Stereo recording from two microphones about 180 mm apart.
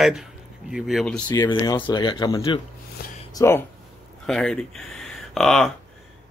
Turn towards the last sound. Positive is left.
turn(degrees=0)  # may be behind; listen again after turning